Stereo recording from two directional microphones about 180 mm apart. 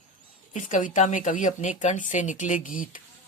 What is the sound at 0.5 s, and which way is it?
Speech, 45° left (ahead or behind).